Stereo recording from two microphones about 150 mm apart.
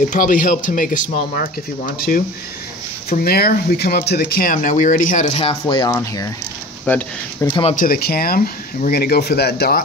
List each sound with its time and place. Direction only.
0.1 s speech: 60° left (ahead or behind)
3.1 s speech: 90° left; by 5.9 s 35° left (ahead or behind)
5.9 s speech: 20° left (ahead or behind)
7.7 s speech: 70° left (ahead or behind)